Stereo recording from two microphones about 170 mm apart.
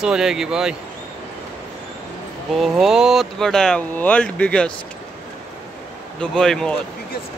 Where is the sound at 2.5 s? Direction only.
Centre (ahead or behind).